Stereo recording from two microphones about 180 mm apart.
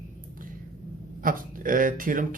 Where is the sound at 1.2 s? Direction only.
50° right (ahead or behind).